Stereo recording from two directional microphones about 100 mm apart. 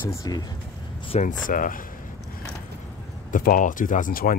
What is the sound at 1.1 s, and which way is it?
Speech, 90° left.